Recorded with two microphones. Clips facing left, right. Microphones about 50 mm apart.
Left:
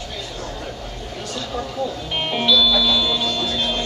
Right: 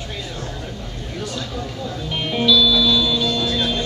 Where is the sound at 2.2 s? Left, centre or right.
Centre.